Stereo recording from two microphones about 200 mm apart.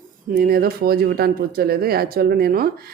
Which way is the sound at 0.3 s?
50° right (ahead or behind).